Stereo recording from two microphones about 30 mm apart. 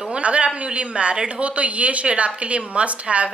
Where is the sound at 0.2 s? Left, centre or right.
Right.